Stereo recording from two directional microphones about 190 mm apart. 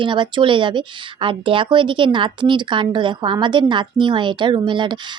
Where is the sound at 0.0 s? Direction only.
25° right (ahead or behind).